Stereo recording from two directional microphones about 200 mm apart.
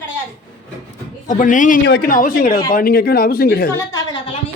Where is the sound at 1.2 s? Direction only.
40° left (ahead or behind).